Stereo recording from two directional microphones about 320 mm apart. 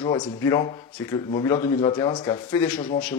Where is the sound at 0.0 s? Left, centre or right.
Centre.